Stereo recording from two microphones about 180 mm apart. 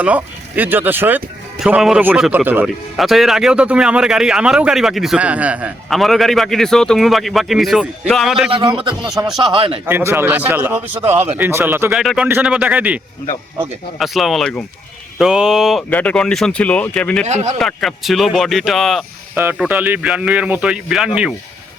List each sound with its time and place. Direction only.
0.0 s speech: 10° right (ahead or behind)
8.4 s speech: 30° right (ahead or behind)
9.8 s a man's voice: 15° right (ahead or behind)
14.0 s speech: centre (ahead or behind)
17.2 s speech: 40° right (ahead or behind)
17.6 s speech: centre (ahead or behind)
19.3 s a man's voice: 10° right (ahead or behind)